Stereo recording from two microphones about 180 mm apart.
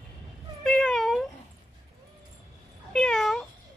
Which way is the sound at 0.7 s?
Centre (ahead or behind).